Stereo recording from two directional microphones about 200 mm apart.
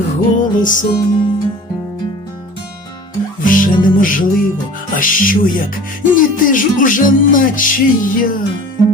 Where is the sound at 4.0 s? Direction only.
45° left (ahead or behind).